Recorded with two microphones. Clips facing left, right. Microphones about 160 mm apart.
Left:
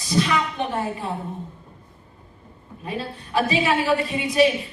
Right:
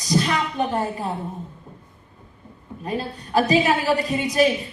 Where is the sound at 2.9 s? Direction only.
40° right (ahead or behind).